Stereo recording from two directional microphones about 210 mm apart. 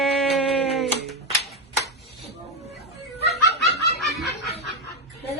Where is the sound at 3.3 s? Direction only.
50° left (ahead or behind).